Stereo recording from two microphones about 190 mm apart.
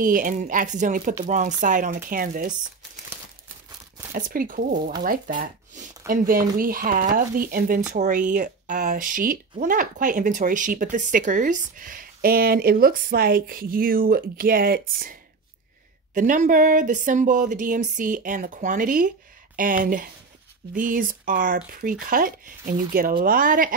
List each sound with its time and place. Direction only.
0.0 s speech: 45° right (ahead or behind)
4.1 s speech: 50° right (ahead or behind)
16.2 s speech: 45° right (ahead or behind)